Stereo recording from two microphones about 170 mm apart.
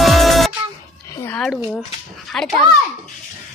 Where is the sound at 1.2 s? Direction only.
5° left (ahead or behind).